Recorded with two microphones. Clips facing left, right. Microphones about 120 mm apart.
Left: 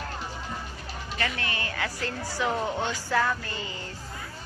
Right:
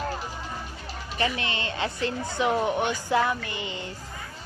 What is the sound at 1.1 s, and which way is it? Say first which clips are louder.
A woman's voice: right 4 dB; 20° right (ahead or behind).